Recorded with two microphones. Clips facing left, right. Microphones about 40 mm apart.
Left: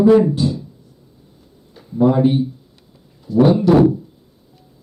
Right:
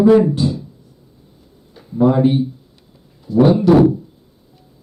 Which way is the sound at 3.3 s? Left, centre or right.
Right.